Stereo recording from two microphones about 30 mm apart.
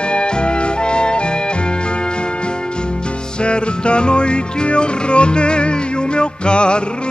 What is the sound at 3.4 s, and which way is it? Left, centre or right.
Music, left.